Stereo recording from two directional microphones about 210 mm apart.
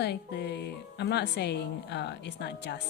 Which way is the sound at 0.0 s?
50° left (ahead or behind).